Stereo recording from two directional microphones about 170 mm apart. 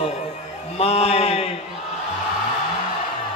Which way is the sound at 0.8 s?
35° left (ahead or behind).